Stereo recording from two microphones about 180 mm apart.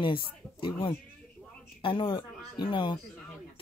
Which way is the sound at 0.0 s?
30° left (ahead or behind).